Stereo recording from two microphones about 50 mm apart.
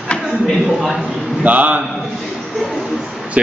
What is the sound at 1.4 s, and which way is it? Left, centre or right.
Speech, right.